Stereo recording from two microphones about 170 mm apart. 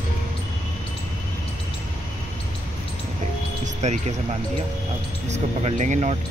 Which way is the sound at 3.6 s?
45° right (ahead or behind).